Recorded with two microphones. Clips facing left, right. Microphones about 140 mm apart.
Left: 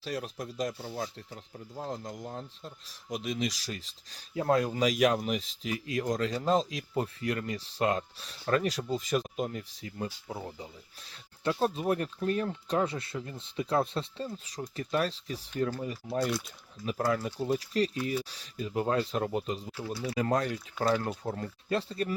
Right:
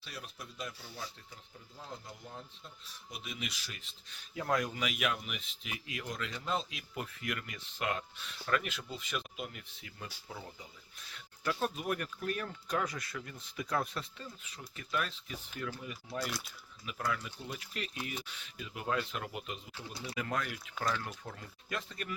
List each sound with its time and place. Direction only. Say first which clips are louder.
0.0 s speech: left 12 dB; 40° left (ahead or behind)
2.8 s speech: left 13 dB; 90° left
3.2 s speech: left 10 dB; 40° left (ahead or behind)